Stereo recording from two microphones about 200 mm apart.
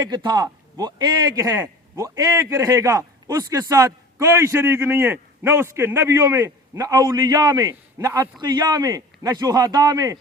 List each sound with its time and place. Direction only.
0.0 s a man's voice: 20° right (ahead or behind)